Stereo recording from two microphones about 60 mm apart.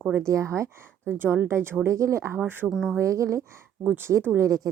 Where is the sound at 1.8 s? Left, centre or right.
Right.